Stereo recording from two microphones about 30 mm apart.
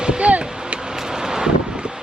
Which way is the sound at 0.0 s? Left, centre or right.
Right.